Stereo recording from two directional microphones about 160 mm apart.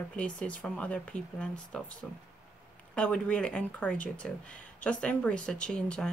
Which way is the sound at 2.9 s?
5° left (ahead or behind).